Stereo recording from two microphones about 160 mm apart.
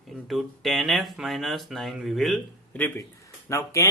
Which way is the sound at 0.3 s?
Centre (ahead or behind).